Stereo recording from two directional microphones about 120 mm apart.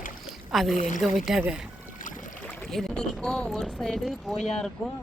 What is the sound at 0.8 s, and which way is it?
Speech, 90° left.